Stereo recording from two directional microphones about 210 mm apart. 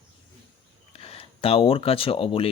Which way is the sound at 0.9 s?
30° left (ahead or behind).